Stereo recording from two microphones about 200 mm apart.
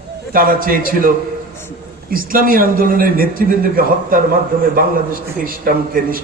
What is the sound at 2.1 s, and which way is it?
A man's voice, 45° right (ahead or behind).